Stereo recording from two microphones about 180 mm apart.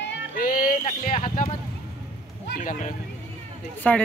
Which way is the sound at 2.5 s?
45° left (ahead or behind).